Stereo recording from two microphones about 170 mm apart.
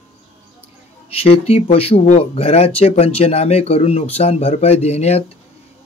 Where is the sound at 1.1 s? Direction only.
35° left (ahead or behind).